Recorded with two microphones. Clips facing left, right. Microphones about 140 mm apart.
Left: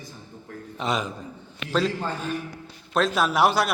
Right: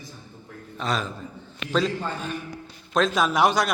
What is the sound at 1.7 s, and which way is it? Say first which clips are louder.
A man's voice: even; 5° left (ahead or behind).